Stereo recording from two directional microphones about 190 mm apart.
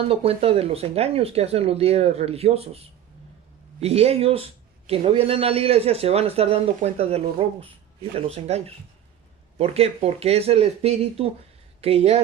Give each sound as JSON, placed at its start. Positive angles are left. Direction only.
{"t": 0.1, "sound": "speech", "side_deg": -30}